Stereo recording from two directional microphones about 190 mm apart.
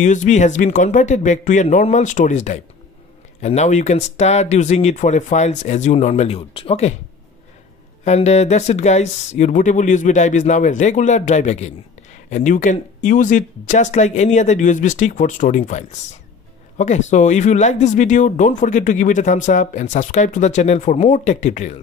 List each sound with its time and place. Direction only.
0.0 s speech: 40° left (ahead or behind)
8.0 s speech: 35° left (ahead or behind)